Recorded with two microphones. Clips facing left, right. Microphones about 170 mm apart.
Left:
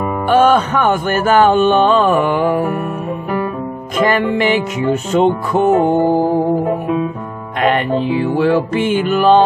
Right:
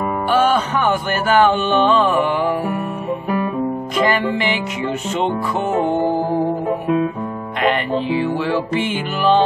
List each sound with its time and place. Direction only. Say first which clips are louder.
0.3 s speech: left 5 dB; 50° left (ahead or behind)
4.1 s speech: left 5 dB; 45° left (ahead or behind)
7.6 s speech: left 4 dB; 50° left (ahead or behind)